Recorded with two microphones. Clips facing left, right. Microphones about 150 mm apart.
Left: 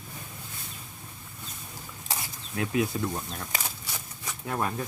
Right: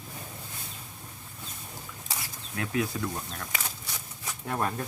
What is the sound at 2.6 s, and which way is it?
Speech, 20° left (ahead or behind).